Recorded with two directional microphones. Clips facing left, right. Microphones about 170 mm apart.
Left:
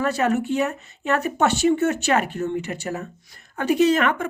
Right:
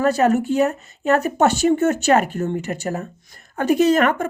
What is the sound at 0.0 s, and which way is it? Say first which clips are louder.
Speech: right 4 dB; 40° right (ahead or behind).